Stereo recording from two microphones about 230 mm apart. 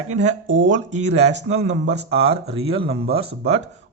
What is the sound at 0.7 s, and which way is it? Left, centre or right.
Speech, right.